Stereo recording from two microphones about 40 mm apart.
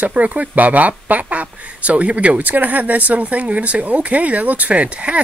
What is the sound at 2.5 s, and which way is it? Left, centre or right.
Speech, right.